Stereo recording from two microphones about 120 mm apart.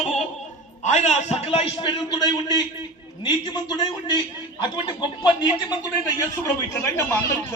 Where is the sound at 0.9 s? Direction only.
70° left (ahead or behind).